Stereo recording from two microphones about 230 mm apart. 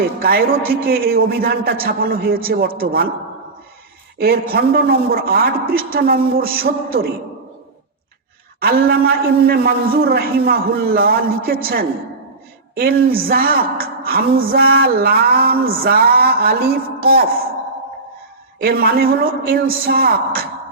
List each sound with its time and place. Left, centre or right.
0.2 s a man's voice: right
4.2 s a man's voice: right
8.6 s a man's voice: right
18.6 s a man's voice: right